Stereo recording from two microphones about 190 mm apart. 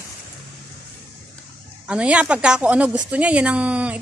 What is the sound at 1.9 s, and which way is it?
Speech, 5° right (ahead or behind).